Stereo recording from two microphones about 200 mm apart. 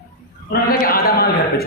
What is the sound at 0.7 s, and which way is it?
Speech, 45° left (ahead or behind).